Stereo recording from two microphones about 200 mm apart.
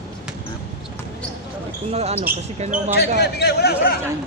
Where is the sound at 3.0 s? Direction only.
55° left (ahead or behind).